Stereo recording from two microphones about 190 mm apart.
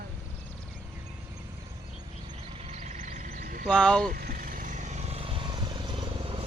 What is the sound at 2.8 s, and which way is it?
Frog, 40° right (ahead or behind).